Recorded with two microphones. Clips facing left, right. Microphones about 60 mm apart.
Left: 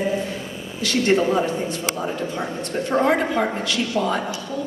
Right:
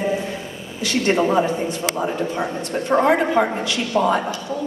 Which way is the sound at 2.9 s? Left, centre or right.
Right.